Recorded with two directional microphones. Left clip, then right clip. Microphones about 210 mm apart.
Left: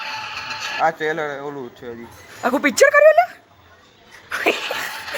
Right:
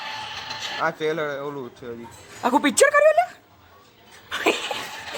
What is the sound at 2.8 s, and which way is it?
Speech, 5° right (ahead or behind).